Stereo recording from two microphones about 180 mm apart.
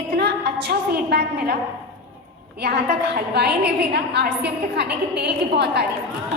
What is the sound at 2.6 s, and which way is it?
A woman's voice, 65° right (ahead or behind).